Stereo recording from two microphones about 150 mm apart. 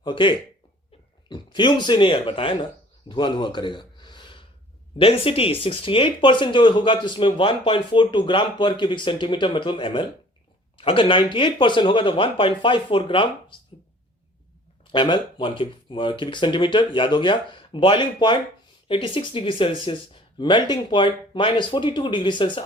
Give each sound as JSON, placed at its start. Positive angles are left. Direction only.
{"t": 0.0, "sound": "speech", "side_deg": 35}
{"t": 14.9, "sound": "speech", "side_deg": 30}